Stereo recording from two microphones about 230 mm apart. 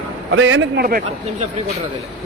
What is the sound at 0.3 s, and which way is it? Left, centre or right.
Speech, right.